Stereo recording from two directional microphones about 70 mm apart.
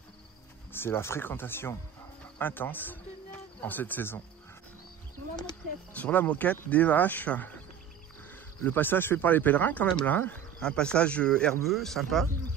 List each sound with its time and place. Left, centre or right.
0.7 s speech: left
5.9 s speech: left
8.6 s speech: left
10.6 s speech: centre
11.6 s speech: centre